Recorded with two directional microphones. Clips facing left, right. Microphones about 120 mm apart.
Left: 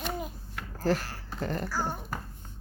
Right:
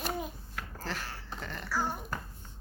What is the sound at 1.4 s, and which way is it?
Speech, 40° left (ahead or behind).